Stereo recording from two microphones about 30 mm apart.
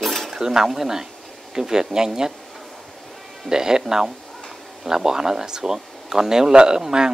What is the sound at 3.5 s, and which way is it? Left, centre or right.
Speech, right.